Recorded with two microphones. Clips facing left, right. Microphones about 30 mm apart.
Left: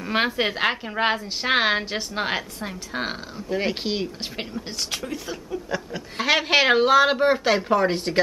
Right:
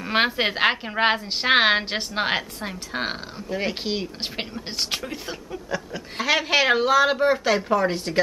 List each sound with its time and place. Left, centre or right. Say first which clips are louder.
0.0 s a woman's voice: right 1 dB; centre
3.4 s speech: left 2 dB; centre
4.6 s a woman's voice: right 3 dB; right
5.7 s speech: right 3 dB; centre